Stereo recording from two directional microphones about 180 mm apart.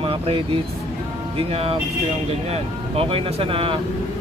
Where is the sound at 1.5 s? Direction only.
30° right (ahead or behind).